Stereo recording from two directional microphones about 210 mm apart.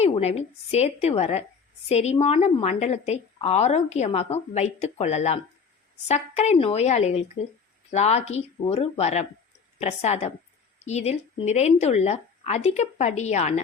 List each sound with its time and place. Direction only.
0.0 s a woman's voice: 30° left (ahead or behind)